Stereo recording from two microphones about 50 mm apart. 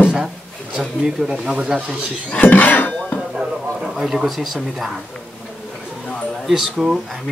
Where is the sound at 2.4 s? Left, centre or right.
Left.